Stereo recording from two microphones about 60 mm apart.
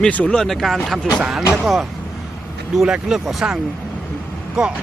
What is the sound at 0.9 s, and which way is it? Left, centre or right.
Speech, centre.